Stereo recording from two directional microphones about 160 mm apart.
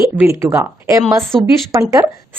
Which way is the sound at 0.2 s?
15° right (ahead or behind).